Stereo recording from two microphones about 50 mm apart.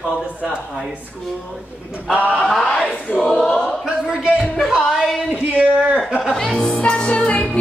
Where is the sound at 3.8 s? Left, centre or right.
Centre.